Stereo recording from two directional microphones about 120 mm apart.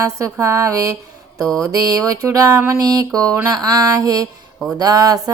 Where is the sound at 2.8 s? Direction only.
30° right (ahead or behind).